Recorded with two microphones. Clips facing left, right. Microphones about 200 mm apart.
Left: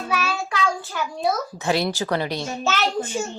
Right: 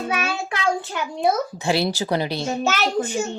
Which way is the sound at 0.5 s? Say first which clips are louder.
Right 3 dB; 20° right (ahead or behind).